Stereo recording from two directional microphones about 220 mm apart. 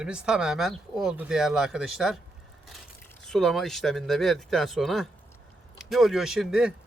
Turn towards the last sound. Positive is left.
turn(degrees=0)  # may be behind; listen again after turning